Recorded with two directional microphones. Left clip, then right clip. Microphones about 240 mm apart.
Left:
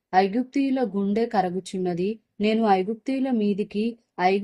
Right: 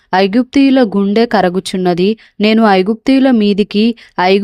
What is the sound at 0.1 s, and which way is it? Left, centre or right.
Speech, right.